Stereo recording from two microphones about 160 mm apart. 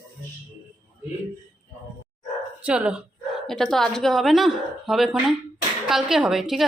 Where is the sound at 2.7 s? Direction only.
5° right (ahead or behind).